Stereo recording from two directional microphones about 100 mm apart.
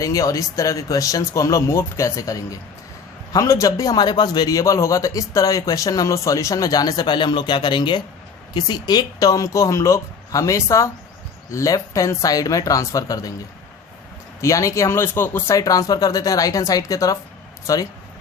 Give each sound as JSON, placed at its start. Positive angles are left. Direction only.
{"t": 0.0, "sound": "a man's voice", "side_deg": 35}
{"t": 14.4, "sound": "a man's voice", "side_deg": 30}